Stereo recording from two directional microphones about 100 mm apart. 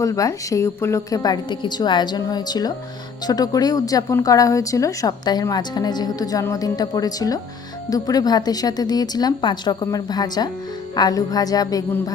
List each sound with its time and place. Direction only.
0.0 s a woman's voice: 35° left (ahead or behind)